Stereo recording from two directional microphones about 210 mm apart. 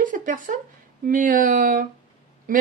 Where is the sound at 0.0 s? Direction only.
40° right (ahead or behind).